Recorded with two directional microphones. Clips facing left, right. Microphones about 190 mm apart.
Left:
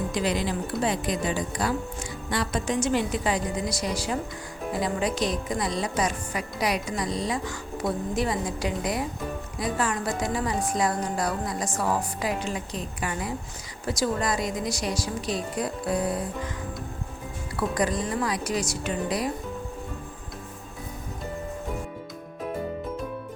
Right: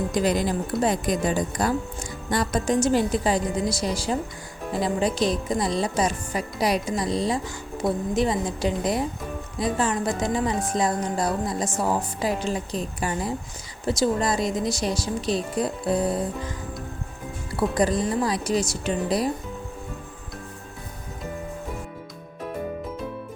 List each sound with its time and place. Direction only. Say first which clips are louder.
0.1 s a woman's voice: right 5 dB; 45° right (ahead or behind); by 16.2 s 25° right (ahead or behind)
17.6 s a woman's voice: right 4 dB; 30° right (ahead or behind)